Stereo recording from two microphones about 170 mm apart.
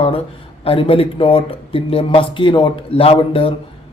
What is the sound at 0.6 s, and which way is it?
Speech, 35° left (ahead or behind).